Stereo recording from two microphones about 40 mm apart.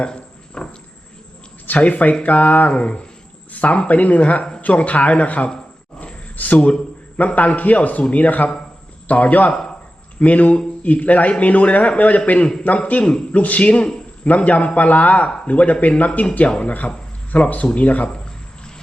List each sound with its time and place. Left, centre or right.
0.0 s a sound: left
1.6 s a man's voice: left
2.6 s speech: left
3.5 s a sound: left
3.8 s a man's voice: left
6.6 s speech: left
7.3 s a man's voice: left
9.5 s speech: centre
10.2 s a man's voice: left
13.3 s a man's voice: left